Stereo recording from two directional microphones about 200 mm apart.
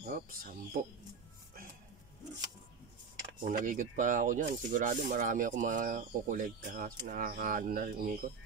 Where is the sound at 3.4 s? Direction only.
40° right (ahead or behind).